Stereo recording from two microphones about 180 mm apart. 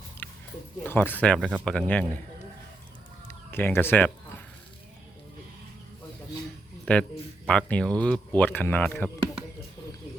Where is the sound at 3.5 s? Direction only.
10° left (ahead or behind).